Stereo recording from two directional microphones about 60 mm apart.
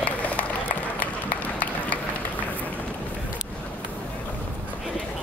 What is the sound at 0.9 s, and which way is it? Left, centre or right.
Run, left.